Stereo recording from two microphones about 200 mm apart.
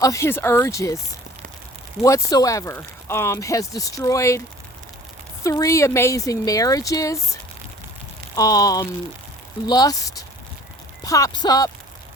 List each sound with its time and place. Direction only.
0.0 s speech: 15° left (ahead or behind)
2.0 s speech: 15° left (ahead or behind)
8.4 s speech: 20° left (ahead or behind)